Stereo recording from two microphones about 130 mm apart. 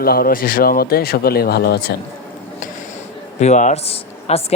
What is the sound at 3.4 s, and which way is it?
Speech, 65° left (ahead or behind).